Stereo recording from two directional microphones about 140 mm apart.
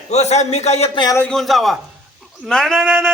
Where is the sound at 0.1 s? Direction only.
55° left (ahead or behind).